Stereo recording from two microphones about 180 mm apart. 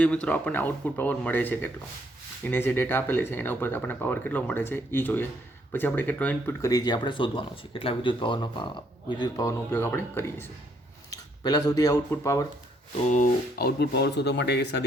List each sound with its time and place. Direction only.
0.0 s speech: 5° left (ahead or behind)
11.1 s a sound: 20° left (ahead or behind)
12.1 s speech: 15° left (ahead or behind)
13.1 s speech: 45° left (ahead or behind)
13.6 s speech: 65° left (ahead or behind)